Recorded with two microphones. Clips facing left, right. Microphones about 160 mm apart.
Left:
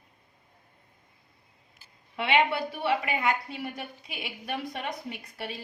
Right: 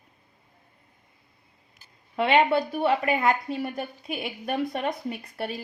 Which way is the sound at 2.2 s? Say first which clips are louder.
Right 5 dB; 45° right (ahead or behind).